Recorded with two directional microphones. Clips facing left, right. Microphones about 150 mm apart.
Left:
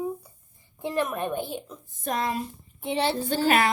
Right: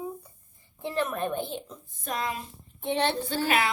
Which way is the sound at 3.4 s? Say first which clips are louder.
Left 4 dB; 45° left (ahead or behind).